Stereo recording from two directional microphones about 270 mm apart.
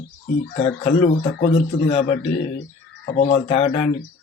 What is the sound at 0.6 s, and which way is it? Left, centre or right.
Speech, left.